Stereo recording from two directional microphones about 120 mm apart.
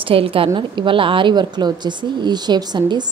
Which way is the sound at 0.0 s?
50° right (ahead or behind).